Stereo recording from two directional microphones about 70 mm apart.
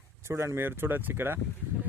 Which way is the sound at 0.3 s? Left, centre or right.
Right.